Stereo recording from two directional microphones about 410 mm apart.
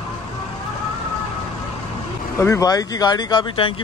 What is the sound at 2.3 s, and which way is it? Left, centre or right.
Speech, centre.